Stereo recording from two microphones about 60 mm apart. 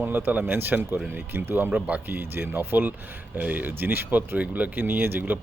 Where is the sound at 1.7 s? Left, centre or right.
Right.